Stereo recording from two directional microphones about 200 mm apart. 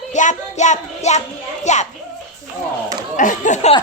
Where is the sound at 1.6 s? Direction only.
35° left (ahead or behind).